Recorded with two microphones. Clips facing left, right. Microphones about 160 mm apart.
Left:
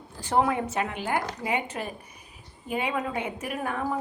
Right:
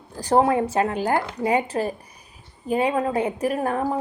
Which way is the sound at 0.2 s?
35° right (ahead or behind).